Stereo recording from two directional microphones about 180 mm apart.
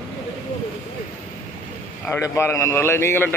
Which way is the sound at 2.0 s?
15° left (ahead or behind).